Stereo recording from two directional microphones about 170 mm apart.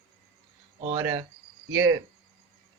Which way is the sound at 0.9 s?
20° right (ahead or behind).